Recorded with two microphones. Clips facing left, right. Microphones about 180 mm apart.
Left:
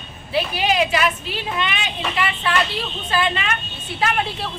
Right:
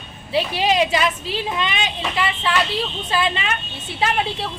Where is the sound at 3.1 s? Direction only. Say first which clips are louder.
Left 2 dB; 25° right (ahead or behind).